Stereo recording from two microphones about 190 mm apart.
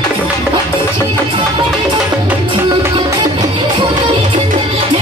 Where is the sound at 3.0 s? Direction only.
25° right (ahead or behind).